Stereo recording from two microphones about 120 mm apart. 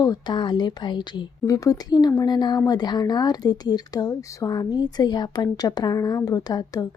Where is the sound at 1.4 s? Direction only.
30° left (ahead or behind).